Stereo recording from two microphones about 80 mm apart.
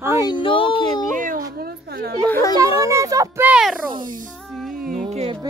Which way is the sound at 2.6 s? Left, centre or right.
Right.